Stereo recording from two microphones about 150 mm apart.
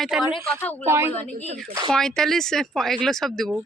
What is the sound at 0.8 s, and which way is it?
Speech, 15° right (ahead or behind).